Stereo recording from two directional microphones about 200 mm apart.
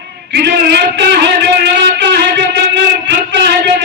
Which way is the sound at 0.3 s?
55° right (ahead or behind).